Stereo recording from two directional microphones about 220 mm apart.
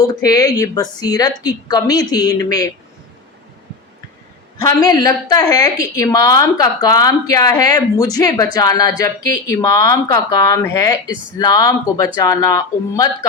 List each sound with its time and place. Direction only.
0.2 s a woman's voice: 15° left (ahead or behind)
4.5 s a woman's voice: 15° left (ahead or behind)